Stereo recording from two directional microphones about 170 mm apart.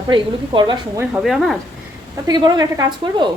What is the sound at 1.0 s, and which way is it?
Speech, 5° right (ahead or behind).